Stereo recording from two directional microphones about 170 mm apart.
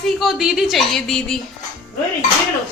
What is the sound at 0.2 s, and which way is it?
Speech, centre (ahead or behind).